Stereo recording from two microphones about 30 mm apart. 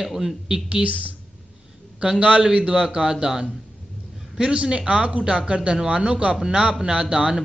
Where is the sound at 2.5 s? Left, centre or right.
Right.